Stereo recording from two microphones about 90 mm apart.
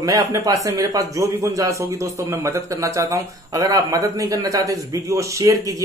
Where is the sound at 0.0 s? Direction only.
40° right (ahead or behind).